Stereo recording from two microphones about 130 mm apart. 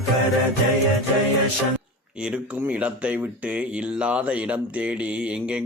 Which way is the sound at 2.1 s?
10° right (ahead or behind).